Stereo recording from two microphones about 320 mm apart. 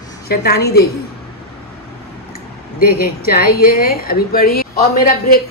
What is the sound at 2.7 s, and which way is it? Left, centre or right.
A woman's voice, left.